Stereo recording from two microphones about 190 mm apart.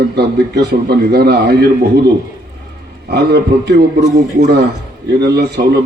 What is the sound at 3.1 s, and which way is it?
Speech, 60° right (ahead or behind).